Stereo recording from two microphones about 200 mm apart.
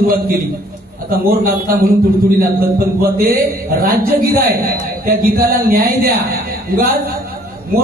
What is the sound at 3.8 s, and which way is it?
Speech, 50° right (ahead or behind).